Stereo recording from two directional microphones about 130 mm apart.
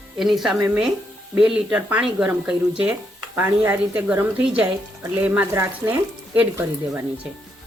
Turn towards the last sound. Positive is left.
turn(degrees=-20)  # may be behind; listen again after turning